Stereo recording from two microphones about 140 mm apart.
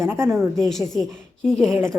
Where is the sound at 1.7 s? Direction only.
15° right (ahead or behind).